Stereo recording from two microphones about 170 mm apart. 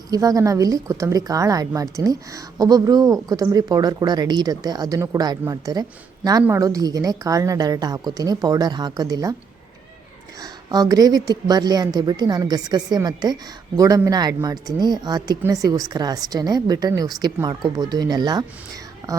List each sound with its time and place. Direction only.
0.1 s a woman's voice: 20° right (ahead or behind)
10.4 s a woman's voice: 20° right (ahead or behind)